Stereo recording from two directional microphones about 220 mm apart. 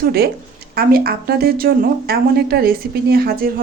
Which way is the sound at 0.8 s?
45° right (ahead or behind).